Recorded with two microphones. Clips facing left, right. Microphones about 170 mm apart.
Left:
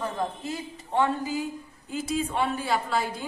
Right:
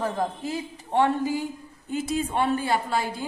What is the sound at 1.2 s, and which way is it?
Speech, 90° right.